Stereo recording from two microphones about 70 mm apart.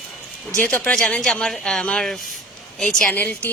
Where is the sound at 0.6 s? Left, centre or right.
Left.